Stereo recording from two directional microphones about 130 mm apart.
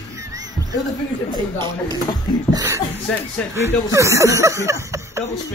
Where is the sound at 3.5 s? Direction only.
20° right (ahead or behind).